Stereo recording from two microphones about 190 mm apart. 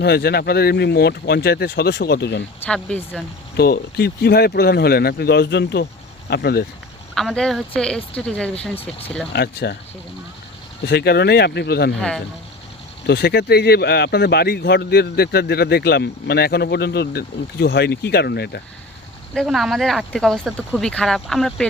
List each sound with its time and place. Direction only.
0.0 s a man's voice: 55° left (ahead or behind)
2.6 s speech: 5° left (ahead or behind)
3.5 s a man's voice: 55° left (ahead or behind)
7.1 s speech: centre (ahead or behind)
9.3 s a man's voice: 60° left (ahead or behind)
10.8 s a man's voice: 60° left (ahead or behind)
13.1 s a man's voice: 60° left (ahead or behind)
19.3 s speech: centre (ahead or behind)